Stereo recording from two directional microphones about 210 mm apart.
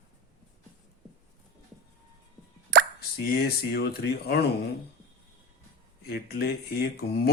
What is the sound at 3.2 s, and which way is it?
Speech, 50° left (ahead or behind).